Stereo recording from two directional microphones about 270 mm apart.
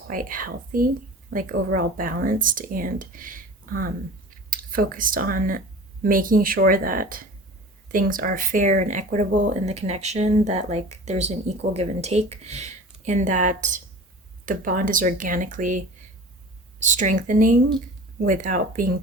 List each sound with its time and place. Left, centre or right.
0.1 s speech: right
16.8 s speech: right